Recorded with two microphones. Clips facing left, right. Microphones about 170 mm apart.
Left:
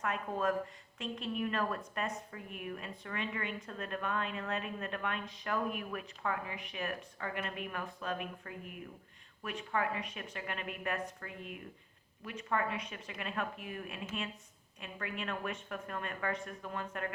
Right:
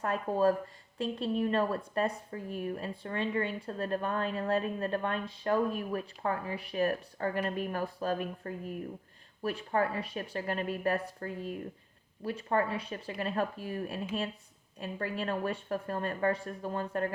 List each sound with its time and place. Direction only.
0.0 s a woman's voice: 35° right (ahead or behind)